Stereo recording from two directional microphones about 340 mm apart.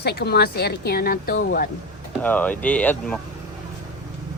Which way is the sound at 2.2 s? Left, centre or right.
Centre.